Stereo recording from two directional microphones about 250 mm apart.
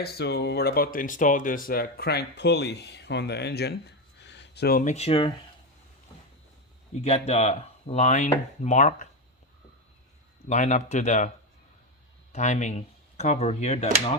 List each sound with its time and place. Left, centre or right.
0.0 s speech: left
7.0 s speech: left
10.5 s speech: left
12.3 s speech: left